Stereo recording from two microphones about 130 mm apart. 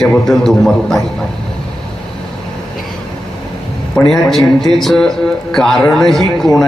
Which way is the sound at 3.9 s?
Centre (ahead or behind).